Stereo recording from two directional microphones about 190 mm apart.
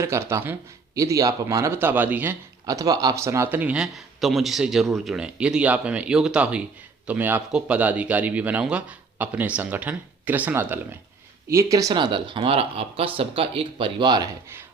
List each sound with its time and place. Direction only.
0.0 s speech: 15° right (ahead or behind)